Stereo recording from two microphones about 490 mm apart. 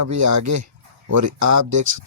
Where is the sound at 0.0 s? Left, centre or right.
Right.